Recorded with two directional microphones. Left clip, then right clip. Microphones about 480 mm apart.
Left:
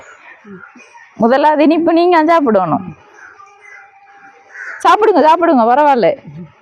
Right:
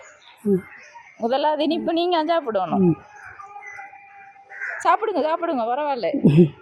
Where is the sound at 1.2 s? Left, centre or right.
Left.